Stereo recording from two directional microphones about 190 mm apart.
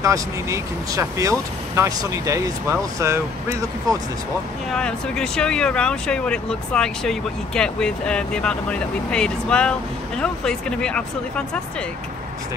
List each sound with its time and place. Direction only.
0.0 s speech: 15° right (ahead or behind)
4.7 s speech: 5° left (ahead or behind)